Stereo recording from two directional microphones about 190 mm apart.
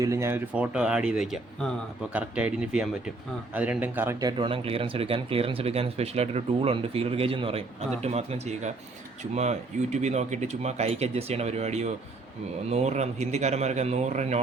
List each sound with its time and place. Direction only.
0.0 s speech: 15° right (ahead or behind); by 14.4 s 35° right (ahead or behind)